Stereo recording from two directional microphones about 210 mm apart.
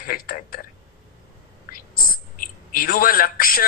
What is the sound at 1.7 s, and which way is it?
A woman's voice, 45° left (ahead or behind).